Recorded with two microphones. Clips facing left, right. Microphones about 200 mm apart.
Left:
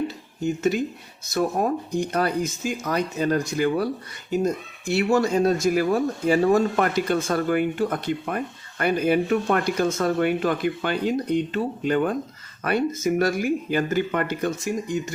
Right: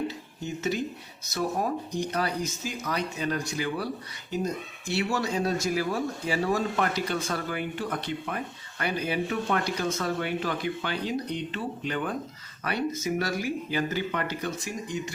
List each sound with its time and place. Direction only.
0.4 s speech: 50° left (ahead or behind)